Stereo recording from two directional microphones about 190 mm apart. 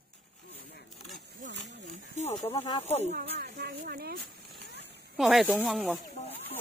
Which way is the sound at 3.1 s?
55° right (ahead or behind).